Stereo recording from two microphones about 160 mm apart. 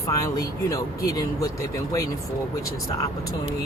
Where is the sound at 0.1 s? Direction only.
20° left (ahead or behind).